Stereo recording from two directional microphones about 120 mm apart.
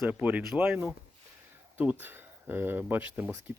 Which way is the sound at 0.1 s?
15° right (ahead or behind).